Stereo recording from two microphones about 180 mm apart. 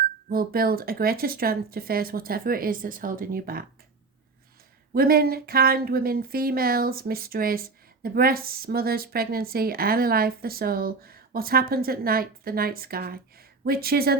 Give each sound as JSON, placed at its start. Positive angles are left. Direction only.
{"t": 0.3, "sound": "speech", "side_deg": -55}
{"t": 4.9, "sound": "speech", "side_deg": -55}